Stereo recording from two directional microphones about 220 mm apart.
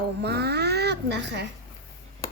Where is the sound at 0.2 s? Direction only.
50° right (ahead or behind).